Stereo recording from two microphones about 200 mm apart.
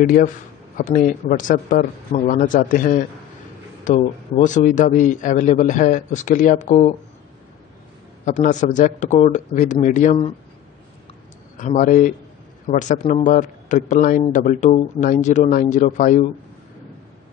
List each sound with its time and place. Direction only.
0.0 s a man's voice: 40° left (ahead or behind)
8.3 s a man's voice: 40° left (ahead or behind)
11.5 s a man's voice: 40° left (ahead or behind)